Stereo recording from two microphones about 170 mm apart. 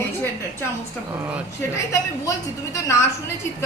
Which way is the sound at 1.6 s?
15° left (ahead or behind).